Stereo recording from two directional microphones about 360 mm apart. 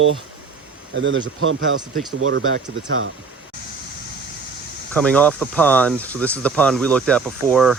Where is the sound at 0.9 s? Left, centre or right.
Right.